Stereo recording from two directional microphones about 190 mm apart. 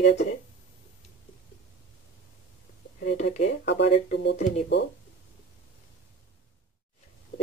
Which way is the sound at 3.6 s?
65° left (ahead or behind).